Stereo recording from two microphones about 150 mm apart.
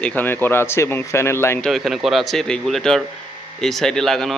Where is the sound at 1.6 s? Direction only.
Centre (ahead or behind).